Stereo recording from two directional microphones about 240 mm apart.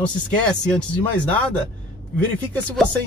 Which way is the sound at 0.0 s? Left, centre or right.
Centre.